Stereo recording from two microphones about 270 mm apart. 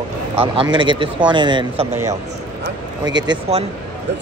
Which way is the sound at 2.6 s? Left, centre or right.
Right.